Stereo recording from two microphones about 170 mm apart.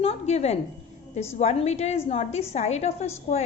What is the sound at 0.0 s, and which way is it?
A woman's voice, 35° left (ahead or behind).